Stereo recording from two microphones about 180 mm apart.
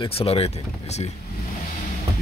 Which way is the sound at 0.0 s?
30° left (ahead or behind).